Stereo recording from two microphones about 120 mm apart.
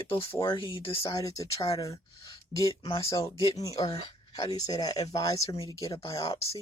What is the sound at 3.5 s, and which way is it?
Speech, 30° left (ahead or behind).